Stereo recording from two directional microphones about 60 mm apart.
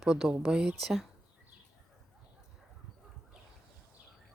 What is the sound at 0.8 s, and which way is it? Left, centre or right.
Speech, centre.